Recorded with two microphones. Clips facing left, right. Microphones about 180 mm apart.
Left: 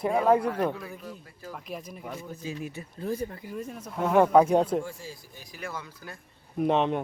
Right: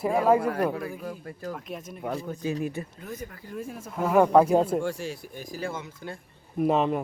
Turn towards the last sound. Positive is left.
turn(degrees=-5)  # may be behind; listen again after turning